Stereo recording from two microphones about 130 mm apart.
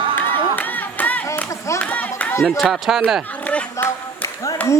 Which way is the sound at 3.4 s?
10° left (ahead or behind).